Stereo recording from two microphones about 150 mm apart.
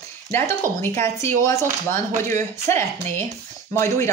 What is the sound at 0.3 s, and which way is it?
Speech, 15° left (ahead or behind).